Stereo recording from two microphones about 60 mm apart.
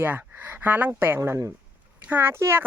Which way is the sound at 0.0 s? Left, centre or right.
Right.